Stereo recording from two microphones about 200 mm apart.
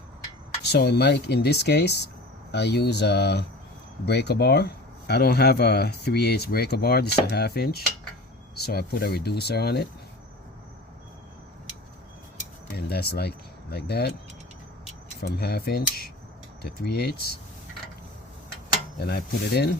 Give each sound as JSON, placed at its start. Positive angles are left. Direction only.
{"t": 0.6, "sound": "speech", "side_deg": 55}
{"t": 12.7, "sound": "speech", "side_deg": 50}
{"t": 15.2, "sound": "speech", "side_deg": 50}
{"t": 18.9, "sound": "speech", "side_deg": 55}